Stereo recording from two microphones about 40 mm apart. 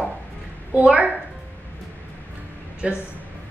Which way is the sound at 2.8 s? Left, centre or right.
Right.